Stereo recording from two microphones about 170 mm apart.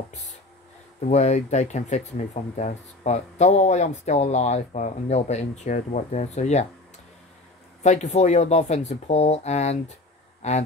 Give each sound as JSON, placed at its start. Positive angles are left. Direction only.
{"t": 0.1, "sound": "a sound", "side_deg": 45}
{"t": 1.0, "sound": "speech", "side_deg": 40}
{"t": 7.8, "sound": "speech", "side_deg": 40}